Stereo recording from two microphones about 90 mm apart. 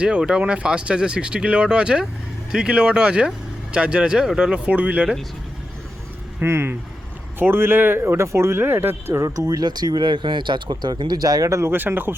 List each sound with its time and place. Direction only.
0.0 s speech: 10° right (ahead or behind)
6.4 s speech: 25° right (ahead or behind)
9.2 s speech: 40° right (ahead or behind); by 12.1 s 25° right (ahead or behind)